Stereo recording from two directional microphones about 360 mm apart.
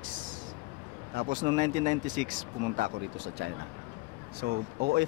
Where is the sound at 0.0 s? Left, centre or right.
Right.